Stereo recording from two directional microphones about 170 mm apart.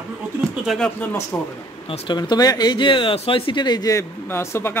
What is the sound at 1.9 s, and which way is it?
Speech, 25° left (ahead or behind).